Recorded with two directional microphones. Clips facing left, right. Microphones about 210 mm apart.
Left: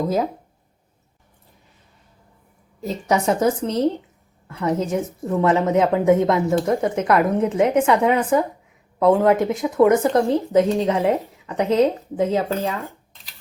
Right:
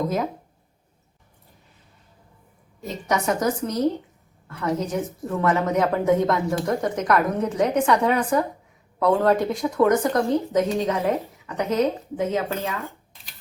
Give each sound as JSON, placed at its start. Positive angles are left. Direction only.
{"t": 2.8, "sound": "speech", "side_deg": 30}